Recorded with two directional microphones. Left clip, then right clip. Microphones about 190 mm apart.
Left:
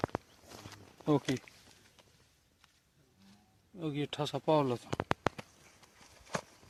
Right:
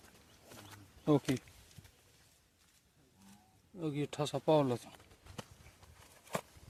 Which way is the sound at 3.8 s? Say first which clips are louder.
Left 1 dB; 5° right (ahead or behind).